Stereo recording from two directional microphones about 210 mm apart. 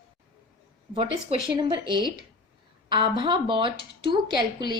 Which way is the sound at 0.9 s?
25° right (ahead or behind).